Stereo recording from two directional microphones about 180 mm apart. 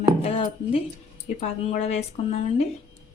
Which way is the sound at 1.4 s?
35° left (ahead or behind).